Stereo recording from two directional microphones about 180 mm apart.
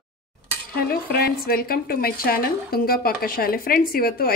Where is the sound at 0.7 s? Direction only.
60° left (ahead or behind).